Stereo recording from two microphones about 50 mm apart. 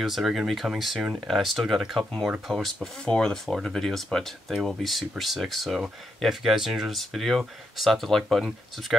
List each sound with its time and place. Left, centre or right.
0.0 s speech: centre
3.1 s speech: centre